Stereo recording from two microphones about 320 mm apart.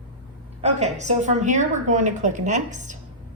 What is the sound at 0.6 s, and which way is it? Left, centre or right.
A woman's voice, centre.